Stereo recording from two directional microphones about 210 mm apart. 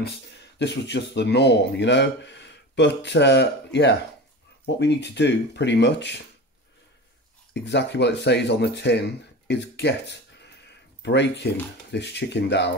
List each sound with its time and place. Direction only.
0.6 s speech: 55° left (ahead or behind)
7.5 s speech: 55° left (ahead or behind)